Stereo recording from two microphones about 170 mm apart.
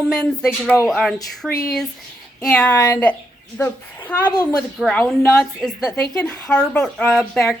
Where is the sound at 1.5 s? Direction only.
60° left (ahead or behind).